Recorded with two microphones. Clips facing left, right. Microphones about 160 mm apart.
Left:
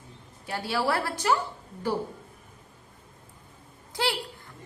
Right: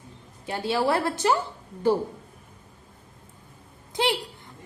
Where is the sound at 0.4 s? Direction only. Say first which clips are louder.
Right 4 dB; 25° right (ahead or behind).